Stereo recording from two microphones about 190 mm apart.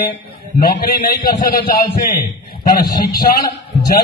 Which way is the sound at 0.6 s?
50° left (ahead or behind).